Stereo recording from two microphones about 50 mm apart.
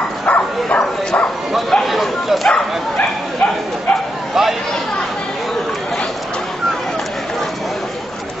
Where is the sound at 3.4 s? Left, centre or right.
Centre.